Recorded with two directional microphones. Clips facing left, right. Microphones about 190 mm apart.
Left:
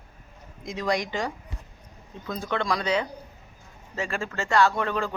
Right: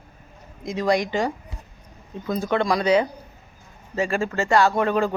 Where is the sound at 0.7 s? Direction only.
5° right (ahead or behind).